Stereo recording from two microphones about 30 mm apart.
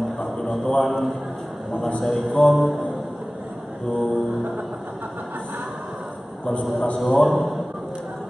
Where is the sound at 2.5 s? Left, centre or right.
Centre.